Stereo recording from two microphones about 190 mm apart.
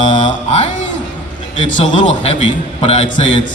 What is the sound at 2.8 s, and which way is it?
Mantra, 35° left (ahead or behind).